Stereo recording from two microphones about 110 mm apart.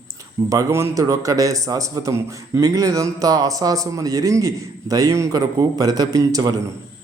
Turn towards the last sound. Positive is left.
turn(degrees=-35)  # may be behind; listen again after turning